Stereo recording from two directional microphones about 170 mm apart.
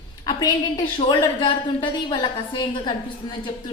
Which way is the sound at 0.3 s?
25° left (ahead or behind).